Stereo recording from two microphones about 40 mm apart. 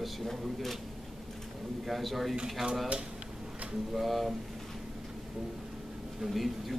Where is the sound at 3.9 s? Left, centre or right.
Centre.